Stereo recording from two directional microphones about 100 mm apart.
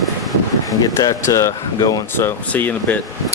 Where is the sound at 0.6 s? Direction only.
40° left (ahead or behind).